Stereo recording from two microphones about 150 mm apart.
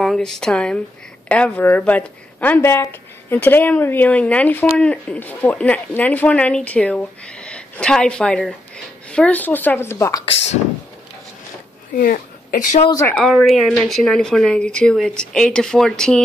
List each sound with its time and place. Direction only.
0.0 s speech: centre (ahead or behind); by 10.2 s 20° left (ahead or behind)
11.9 s speech: 75° left (ahead or behind)
13.0 s speech: 5° left (ahead or behind)